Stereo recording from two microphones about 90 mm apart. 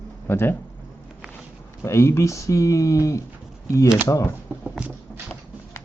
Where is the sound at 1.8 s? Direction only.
30° left (ahead or behind).